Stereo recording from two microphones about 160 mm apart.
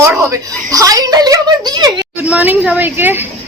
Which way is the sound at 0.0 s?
15° right (ahead or behind).